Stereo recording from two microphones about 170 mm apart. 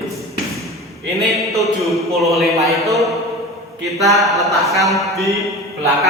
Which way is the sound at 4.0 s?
Centre (ahead or behind).